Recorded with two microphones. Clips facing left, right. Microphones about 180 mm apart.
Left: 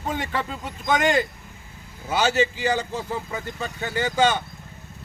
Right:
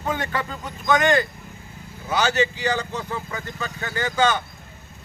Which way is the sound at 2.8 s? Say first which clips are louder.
Left 1 dB; 25° left (ahead or behind).